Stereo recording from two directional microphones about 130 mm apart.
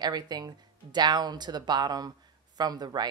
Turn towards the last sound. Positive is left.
turn(degrees=-30)  # may be behind; listen again after turning